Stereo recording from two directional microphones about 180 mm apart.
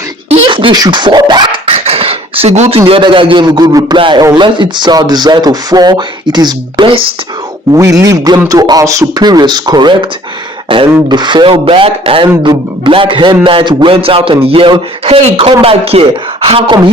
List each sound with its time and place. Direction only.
0.3 s speech: 30° right (ahead or behind)
7.7 s a woman's voice: 20° right (ahead or behind)